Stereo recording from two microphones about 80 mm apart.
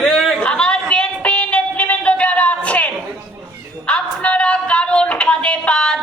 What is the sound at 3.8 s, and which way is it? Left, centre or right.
Speech, centre.